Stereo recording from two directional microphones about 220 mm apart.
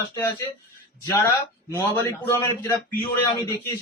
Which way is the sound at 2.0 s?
15° left (ahead or behind).